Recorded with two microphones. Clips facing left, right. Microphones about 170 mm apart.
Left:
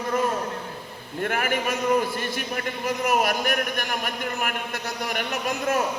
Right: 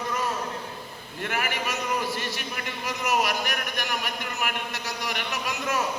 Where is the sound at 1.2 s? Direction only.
50° left (ahead or behind).